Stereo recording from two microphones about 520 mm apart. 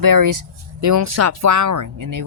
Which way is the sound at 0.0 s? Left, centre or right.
Right.